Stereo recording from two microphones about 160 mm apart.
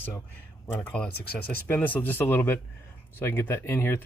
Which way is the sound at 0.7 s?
10° left (ahead or behind).